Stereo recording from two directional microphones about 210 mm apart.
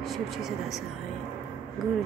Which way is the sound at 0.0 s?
Centre (ahead or behind).